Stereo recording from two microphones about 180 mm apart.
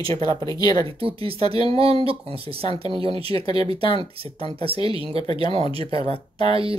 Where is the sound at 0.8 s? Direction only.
30° right (ahead or behind).